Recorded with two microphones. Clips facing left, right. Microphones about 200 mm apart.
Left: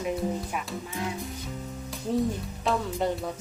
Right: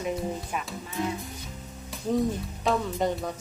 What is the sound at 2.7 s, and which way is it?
Speech, centre (ahead or behind).